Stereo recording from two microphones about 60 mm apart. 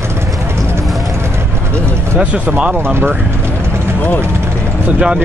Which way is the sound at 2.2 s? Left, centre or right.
Centre.